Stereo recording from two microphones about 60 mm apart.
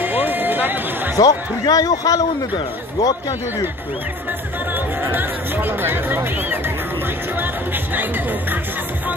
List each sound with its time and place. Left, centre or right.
0.0 s music: right
1.1 s a man's voice: left
4.7 s music: right